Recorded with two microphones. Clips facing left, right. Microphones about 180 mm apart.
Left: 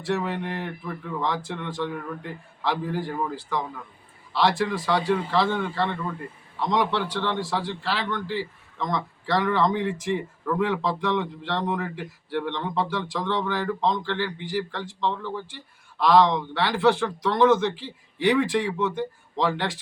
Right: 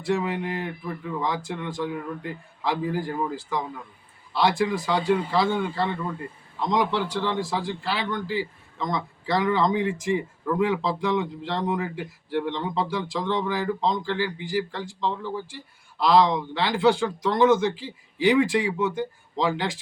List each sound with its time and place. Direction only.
0.1 s a man's voice: 10° right (ahead or behind)